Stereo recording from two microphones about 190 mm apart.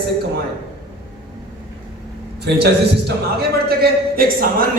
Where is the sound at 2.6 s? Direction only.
60° right (ahead or behind).